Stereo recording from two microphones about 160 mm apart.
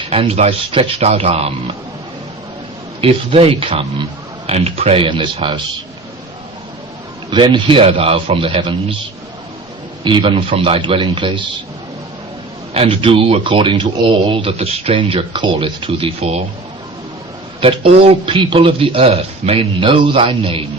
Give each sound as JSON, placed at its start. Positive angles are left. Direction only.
{"t": 0.1, "sound": "a man's voice", "side_deg": -40}
{"t": 3.0, "sound": "a man's voice", "side_deg": -35}
{"t": 7.3, "sound": "a man's voice", "side_deg": -30}
{"t": 10.0, "sound": "a man's voice", "side_deg": -30}
{"t": 12.7, "sound": "a man's voice", "side_deg": -35}
{"t": 17.6, "sound": "a man's voice", "side_deg": -35}